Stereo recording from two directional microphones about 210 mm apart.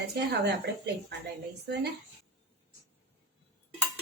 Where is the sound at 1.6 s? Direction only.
50° right (ahead or behind).